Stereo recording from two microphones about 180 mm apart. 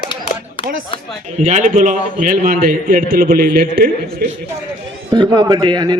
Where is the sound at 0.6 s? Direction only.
30° left (ahead or behind).